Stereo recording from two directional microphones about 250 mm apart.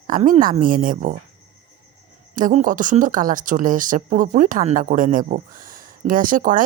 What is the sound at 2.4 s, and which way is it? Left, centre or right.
Speech, right.